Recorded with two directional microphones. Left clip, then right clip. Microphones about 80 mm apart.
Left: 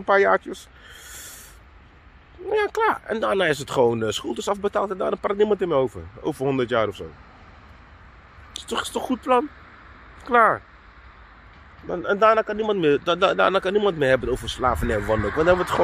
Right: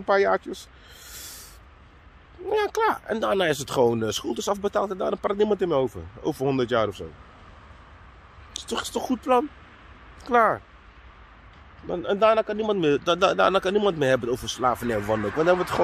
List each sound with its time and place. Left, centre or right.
0.0 s speech: centre
2.4 s a man's voice: centre
6.4 s a man's voice: centre
8.6 s speech: centre
11.8 s a man's voice: centre
15.0 s speech: left
15.3 s speech: centre